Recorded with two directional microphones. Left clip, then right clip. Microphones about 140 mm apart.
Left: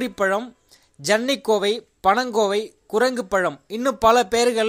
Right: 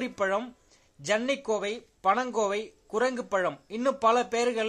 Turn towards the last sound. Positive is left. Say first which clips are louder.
# left 8 dB
turn(degrees=35)  # may be behind; listen again after turning